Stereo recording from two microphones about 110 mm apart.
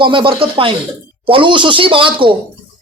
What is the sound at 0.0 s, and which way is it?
Speech, 45° right (ahead or behind).